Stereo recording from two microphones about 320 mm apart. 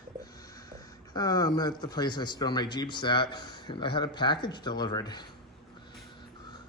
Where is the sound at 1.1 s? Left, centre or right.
Centre.